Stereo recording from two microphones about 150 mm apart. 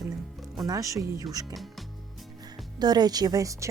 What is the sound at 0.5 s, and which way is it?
Speech, 25° right (ahead or behind).